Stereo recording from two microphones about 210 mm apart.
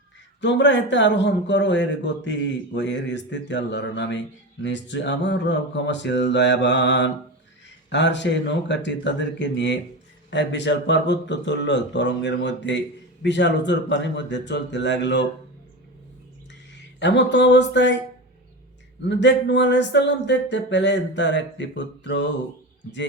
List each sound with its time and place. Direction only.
0.4 s a man's voice: 60° left (ahead or behind)
17.0 s a man's voice: 55° left (ahead or behind)
19.0 s a man's voice: 55° left (ahead or behind)